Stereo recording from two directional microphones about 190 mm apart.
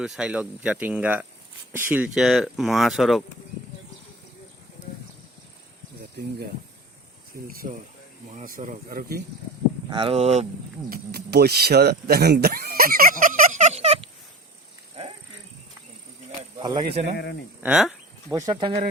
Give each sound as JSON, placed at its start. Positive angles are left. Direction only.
{"t": 0.0, "sound": "speech", "side_deg": -5}
{"t": 6.0, "sound": "a sound", "side_deg": -55}
{"t": 7.4, "sound": "speech", "side_deg": -50}
{"t": 9.9, "sound": "speech", "side_deg": -30}
{"t": 10.8, "sound": "speech", "side_deg": -55}
{"t": 15.0, "sound": "dog", "side_deg": -30}
{"t": 16.4, "sound": "snake", "side_deg": -25}
{"t": 17.2, "sound": "speech", "side_deg": 60}
{"t": 17.6, "sound": "speech", "side_deg": -5}
{"t": 18.3, "sound": "speech", "side_deg": -20}